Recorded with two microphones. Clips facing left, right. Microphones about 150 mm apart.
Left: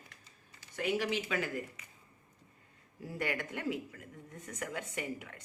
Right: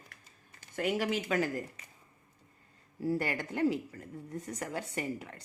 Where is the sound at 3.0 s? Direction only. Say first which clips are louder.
Right 5 dB; 35° right (ahead or behind).